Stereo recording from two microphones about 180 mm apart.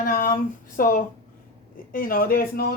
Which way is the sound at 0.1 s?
50° left (ahead or behind).